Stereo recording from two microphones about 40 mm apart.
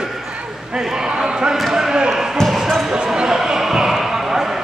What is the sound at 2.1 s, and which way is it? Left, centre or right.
Basketball bounce, centre.